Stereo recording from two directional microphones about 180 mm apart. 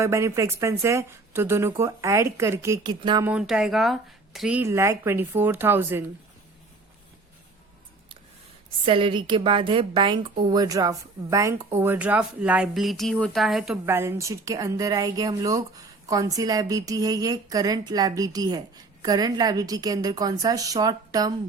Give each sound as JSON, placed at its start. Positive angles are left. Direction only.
{"t": 0.0, "sound": "a woman's voice", "side_deg": -15}
{"t": 3.2, "sound": "a woman's voice", "side_deg": -5}
{"t": 8.8, "sound": "a woman's voice", "side_deg": -30}
{"t": 13.8, "sound": "speech", "side_deg": -15}